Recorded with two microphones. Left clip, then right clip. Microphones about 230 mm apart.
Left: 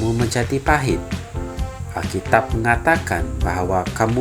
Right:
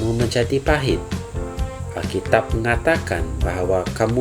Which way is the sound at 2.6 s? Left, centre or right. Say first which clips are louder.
Left 2 dB; left.